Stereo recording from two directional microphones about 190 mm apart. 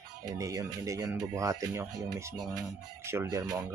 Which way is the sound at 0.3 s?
15° right (ahead or behind).